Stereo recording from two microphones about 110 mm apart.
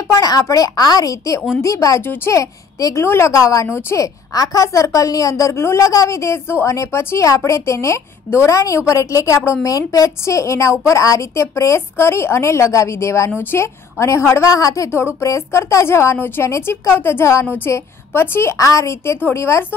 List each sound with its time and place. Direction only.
0.1 s a woman's voice: 30° left (ahead or behind)